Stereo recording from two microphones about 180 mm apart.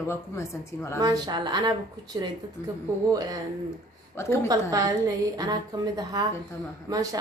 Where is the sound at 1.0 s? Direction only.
20° right (ahead or behind).